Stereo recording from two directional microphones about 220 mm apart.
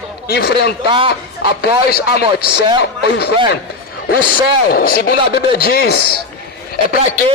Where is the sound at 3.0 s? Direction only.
50° left (ahead or behind).